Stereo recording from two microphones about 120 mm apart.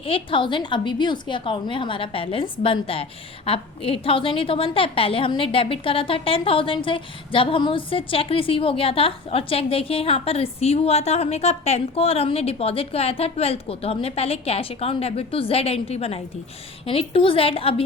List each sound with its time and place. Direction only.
0.0 s a woman's voice: 45° left (ahead or behind)